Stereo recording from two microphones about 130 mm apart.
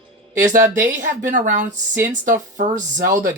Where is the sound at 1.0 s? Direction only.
80° right.